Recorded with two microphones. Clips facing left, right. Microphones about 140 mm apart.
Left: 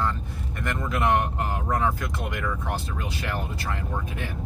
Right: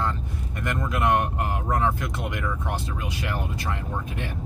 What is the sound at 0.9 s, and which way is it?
Speech, 10° right (ahead or behind).